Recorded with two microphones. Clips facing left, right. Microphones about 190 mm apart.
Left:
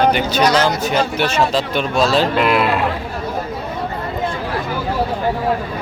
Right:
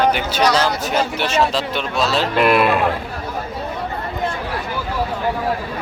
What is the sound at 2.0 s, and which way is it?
Speech, 45° left (ahead or behind).